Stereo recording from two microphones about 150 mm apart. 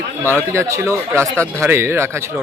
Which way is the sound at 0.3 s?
15° right (ahead or behind).